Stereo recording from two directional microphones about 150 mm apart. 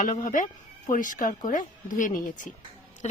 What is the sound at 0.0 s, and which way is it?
A woman's voice, 60° left (ahead or behind).